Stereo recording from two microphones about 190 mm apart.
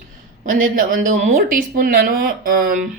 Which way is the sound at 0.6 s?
45° right (ahead or behind).